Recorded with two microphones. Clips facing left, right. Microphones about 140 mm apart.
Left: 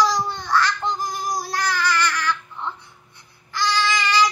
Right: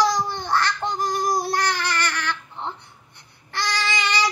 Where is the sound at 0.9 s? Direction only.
70° right (ahead or behind).